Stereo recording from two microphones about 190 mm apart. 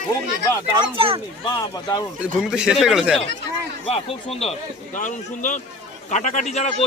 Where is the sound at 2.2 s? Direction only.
5° right (ahead or behind).